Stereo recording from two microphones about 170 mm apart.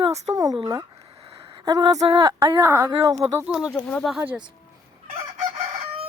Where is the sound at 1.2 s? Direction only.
30° right (ahead or behind).